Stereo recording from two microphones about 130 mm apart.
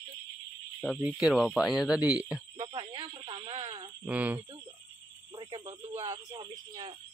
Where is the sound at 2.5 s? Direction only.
35° right (ahead or behind).